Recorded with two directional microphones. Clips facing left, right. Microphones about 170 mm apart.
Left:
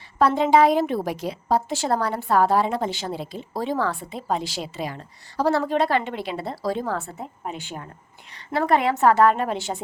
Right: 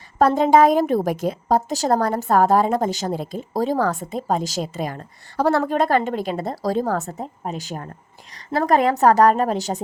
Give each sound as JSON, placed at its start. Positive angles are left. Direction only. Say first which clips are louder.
{"t": 0.2, "sound": "a woman's voice", "louder": "right 3 dB", "side_deg": -45}